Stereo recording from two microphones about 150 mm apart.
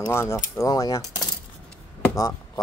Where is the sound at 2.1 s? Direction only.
20° left (ahead or behind).